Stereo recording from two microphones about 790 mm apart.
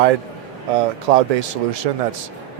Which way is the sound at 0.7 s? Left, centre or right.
Right.